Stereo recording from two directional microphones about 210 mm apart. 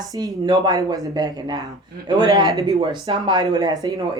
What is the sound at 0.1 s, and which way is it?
A woman's voice, 20° right (ahead or behind).